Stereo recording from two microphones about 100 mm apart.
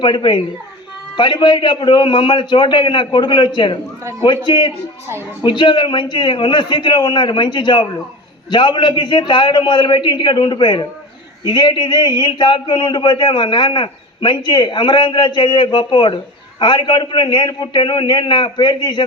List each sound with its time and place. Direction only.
0.0 s a man's voice: 55° left (ahead or behind)